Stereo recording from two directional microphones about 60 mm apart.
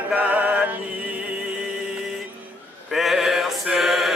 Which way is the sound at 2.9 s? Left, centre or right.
Centre.